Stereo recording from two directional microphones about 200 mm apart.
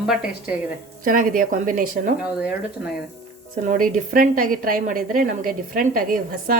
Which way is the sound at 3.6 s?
40° right (ahead or behind).